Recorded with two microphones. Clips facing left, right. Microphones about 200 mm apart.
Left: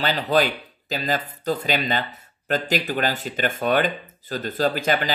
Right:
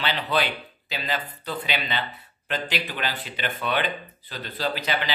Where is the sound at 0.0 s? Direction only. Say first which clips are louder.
Left 5 dB; 40° left (ahead or behind).